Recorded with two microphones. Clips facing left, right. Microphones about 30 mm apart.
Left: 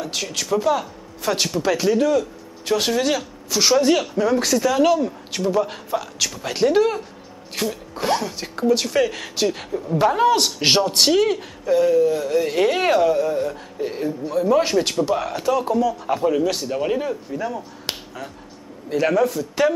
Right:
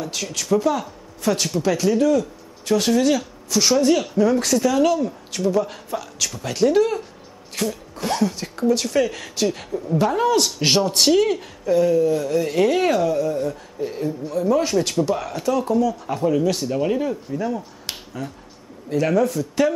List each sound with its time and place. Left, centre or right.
0.0 s speech: centre
4.0 s speech: centre